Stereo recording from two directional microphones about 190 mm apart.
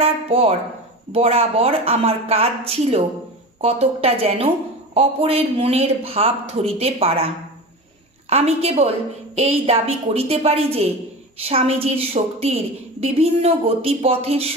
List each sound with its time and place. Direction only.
0.0 s a sound: 30° right (ahead or behind)
1.1 s a woman's voice: 30° right (ahead or behind)
8.3 s a woman's voice: 30° right (ahead or behind)